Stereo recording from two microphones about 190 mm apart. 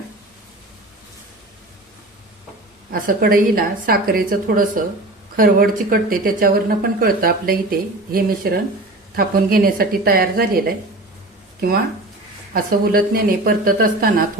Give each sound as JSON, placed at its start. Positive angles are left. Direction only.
{"t": 2.9, "sound": "speech", "side_deg": -50}
{"t": 12.5, "sound": "speech", "side_deg": -50}